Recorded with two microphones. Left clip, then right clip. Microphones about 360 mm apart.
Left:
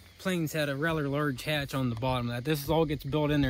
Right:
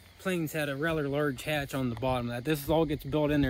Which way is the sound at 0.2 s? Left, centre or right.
Centre.